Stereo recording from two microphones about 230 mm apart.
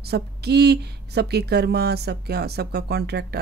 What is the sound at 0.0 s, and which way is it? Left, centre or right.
Speech, right.